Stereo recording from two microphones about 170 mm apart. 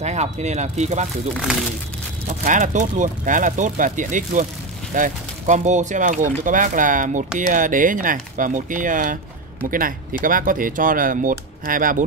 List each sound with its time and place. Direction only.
0.0 s speech: 40° right (ahead or behind)
1.3 s speech: 5° right (ahead or behind)
2.2 s speech: 45° right (ahead or behind)